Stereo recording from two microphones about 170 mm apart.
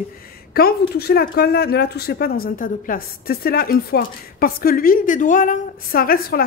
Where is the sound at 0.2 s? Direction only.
60° left (ahead or behind).